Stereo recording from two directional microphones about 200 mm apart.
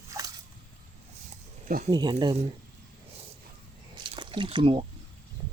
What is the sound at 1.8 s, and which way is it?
Speech, 20° right (ahead or behind).